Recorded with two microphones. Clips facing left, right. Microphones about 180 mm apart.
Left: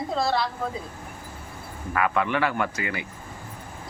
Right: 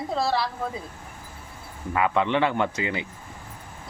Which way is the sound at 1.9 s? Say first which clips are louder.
Right 2 dB; 20° right (ahead or behind).